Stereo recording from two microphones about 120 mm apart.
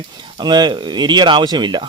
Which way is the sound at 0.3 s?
40° right (ahead or behind).